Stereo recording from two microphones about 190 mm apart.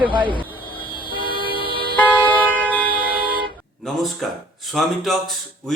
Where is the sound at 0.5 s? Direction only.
25° left (ahead or behind).